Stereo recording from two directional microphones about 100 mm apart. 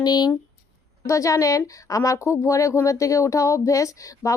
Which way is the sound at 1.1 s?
35° left (ahead or behind).